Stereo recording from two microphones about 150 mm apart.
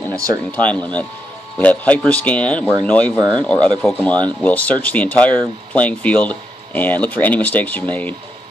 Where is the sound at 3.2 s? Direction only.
30° right (ahead or behind).